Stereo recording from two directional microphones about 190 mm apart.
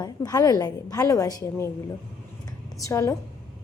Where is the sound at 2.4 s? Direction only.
15° left (ahead or behind).